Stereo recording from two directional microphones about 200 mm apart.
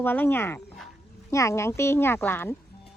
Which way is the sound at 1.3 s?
15° left (ahead or behind).